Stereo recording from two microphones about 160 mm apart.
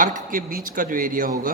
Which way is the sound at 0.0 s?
55° right (ahead or behind).